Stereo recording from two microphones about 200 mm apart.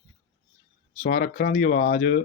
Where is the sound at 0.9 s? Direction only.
40° left (ahead or behind).